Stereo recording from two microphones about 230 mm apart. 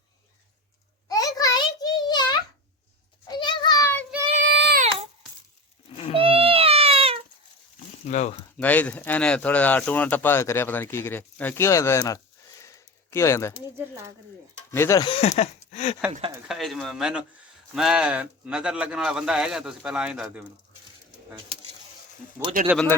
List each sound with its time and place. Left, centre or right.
1.0 s a sound: centre
4.4 s child singing: right
6.1 s a sound: right
8.0 s speech: left
8.5 s speech: centre
14.7 s speech: centre; by 16.0 s left
16.5 s speech: centre
22.6 s speech: centre